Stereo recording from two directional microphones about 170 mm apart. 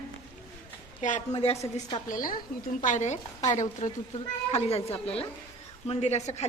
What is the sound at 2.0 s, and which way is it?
Speech, 55° left (ahead or behind).